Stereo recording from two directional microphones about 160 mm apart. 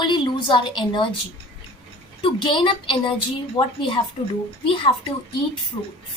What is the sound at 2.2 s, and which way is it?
A woman's voice, 30° left (ahead or behind).